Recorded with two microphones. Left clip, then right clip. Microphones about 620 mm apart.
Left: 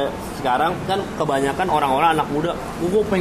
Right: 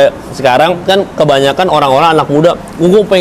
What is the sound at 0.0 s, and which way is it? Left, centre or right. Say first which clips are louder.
A man's voice: right 14 dB; right.